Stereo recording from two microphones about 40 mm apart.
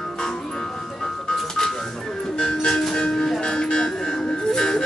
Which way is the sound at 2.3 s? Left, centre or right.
Centre.